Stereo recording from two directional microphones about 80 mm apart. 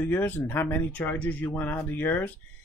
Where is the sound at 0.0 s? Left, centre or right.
Left.